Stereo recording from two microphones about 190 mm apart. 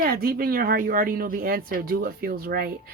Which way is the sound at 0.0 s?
50° right (ahead or behind).